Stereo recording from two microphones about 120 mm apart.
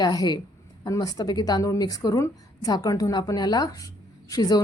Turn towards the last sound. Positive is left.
turn(degrees=35)  # may be behind; listen again after turning